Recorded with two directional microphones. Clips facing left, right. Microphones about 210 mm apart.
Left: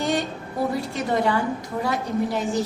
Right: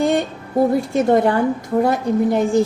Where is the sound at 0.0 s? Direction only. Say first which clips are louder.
Right 6 dB; 50° right (ahead or behind).